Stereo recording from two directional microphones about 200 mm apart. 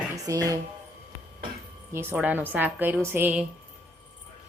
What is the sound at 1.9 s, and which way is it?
A woman's voice, 10° right (ahead or behind).